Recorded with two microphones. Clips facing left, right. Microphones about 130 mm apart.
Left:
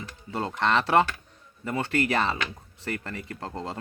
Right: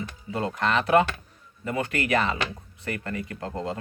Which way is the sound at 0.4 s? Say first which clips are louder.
Even; 30° left (ahead or behind).